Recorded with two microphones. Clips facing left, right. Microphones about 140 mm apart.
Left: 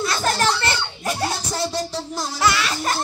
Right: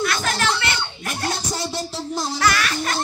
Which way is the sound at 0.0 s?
35° left (ahead or behind).